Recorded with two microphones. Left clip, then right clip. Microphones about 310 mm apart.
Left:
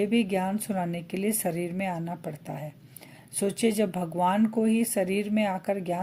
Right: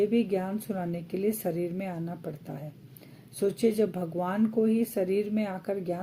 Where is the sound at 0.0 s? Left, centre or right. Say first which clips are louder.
Even; left.